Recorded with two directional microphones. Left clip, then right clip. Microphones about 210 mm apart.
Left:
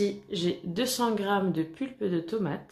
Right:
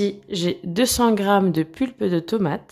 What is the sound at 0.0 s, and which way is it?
Speech, 45° right (ahead or behind).